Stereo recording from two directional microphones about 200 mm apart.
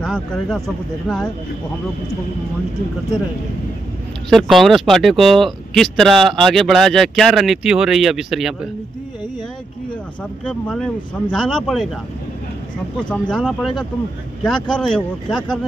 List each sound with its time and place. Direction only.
0.0 s speech: centre (ahead or behind)
4.3 s speech: centre (ahead or behind)
10.4 s speech: 5° left (ahead or behind)
13.1 s speech: 5° left (ahead or behind)